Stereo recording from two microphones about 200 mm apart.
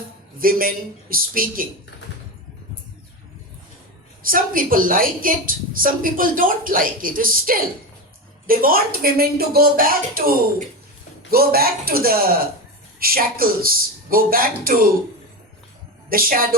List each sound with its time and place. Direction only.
0.3 s a woman's voice: 45° right (ahead or behind)
4.2 s a woman's voice: 45° right (ahead or behind)
16.0 s a woman's voice: 45° right (ahead or behind)